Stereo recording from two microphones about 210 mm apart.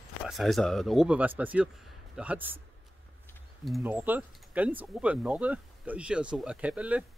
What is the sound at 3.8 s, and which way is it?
Speech, 10° right (ahead or behind).